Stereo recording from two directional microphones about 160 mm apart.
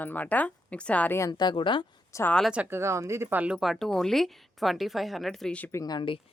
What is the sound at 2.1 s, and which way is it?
Speech, 10° left (ahead or behind).